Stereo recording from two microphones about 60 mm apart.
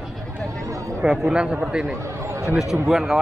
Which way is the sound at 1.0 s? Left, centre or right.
Centre.